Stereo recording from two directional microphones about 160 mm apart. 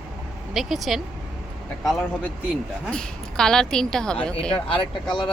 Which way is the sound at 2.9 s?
5° left (ahead or behind).